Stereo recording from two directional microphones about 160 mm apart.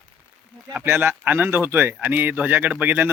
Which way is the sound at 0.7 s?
15° right (ahead or behind).